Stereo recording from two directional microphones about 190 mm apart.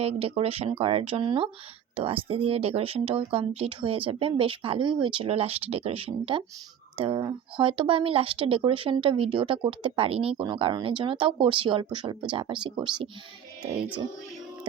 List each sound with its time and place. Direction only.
0.0 s speech: 30° right (ahead or behind)